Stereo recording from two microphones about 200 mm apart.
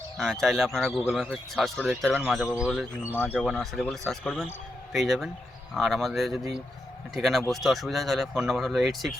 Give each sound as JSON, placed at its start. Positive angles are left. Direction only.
{"t": 0.2, "sound": "speech", "side_deg": 0}